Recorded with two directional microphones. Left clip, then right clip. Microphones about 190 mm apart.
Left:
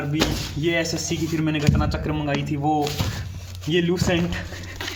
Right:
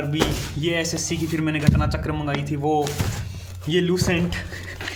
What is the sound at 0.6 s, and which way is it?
A man's voice, 10° right (ahead or behind).